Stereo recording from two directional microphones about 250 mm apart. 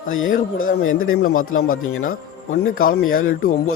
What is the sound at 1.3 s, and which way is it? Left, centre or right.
Speech, left.